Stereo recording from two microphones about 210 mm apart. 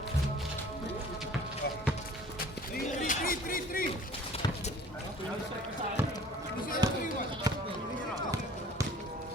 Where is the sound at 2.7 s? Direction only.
40° left (ahead or behind).